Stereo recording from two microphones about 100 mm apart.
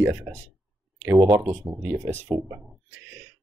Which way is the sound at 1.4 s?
20° right (ahead or behind).